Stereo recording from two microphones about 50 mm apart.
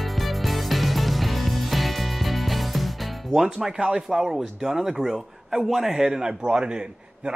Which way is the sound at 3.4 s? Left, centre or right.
Centre.